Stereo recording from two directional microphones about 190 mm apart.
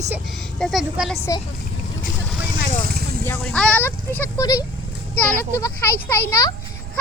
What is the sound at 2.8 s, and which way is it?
Vehicle, 55° right (ahead or behind).